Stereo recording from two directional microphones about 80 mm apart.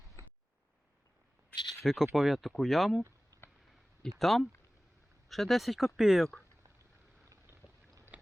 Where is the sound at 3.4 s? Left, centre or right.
Left.